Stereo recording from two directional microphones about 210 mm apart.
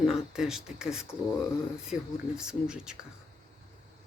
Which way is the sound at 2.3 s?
5° right (ahead or behind).